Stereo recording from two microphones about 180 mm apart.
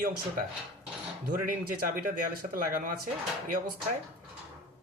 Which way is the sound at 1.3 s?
50° right (ahead or behind).